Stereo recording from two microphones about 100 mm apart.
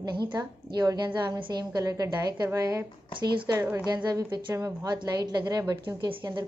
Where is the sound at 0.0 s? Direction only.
45° right (ahead or behind).